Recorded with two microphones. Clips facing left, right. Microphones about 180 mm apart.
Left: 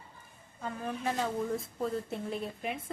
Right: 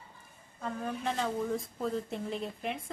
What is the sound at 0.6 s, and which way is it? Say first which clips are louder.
A woman's voice: even; centre (ahead or behind).